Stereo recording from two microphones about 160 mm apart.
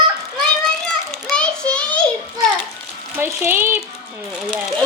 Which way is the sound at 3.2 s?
15° right (ahead or behind).